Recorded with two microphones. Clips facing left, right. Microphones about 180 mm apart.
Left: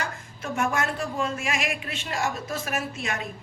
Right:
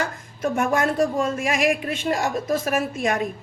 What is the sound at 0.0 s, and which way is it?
A woman's voice, 50° right (ahead or behind).